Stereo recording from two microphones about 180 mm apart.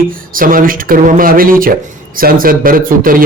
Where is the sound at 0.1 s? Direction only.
50° right (ahead or behind).